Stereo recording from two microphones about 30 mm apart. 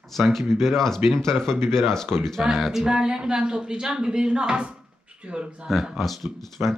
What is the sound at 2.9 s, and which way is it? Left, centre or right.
Speech, right.